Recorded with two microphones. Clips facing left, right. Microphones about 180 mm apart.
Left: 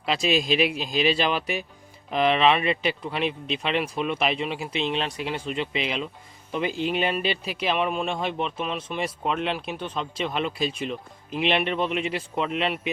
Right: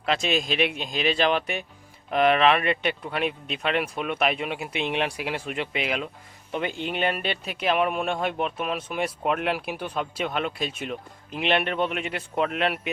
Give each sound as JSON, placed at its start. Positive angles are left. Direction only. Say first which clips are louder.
{"t": 0.1, "sound": "speech", "louder": "left 2 dB", "side_deg": 0}